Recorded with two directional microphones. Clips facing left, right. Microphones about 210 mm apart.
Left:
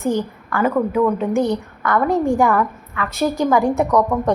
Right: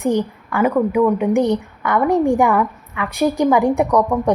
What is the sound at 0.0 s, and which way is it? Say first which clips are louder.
A woman's voice: right 2 dB; 15° right (ahead or behind).